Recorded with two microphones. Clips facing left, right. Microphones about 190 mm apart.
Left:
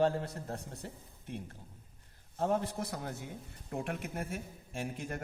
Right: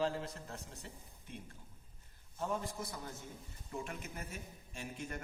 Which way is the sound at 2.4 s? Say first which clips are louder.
Left 7 dB; 60° left (ahead or behind).